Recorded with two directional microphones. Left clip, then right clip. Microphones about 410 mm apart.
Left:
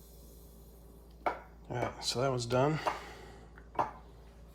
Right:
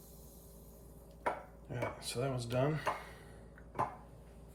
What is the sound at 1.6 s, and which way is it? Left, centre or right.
Speech, centre.